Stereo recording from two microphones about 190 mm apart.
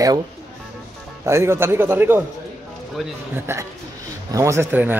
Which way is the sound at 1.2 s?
15° right (ahead or behind).